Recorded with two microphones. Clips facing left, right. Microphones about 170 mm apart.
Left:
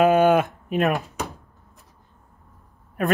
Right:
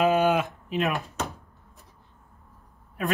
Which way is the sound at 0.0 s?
55° left (ahead or behind).